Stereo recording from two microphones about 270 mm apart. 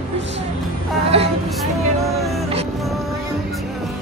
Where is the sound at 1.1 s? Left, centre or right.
Right.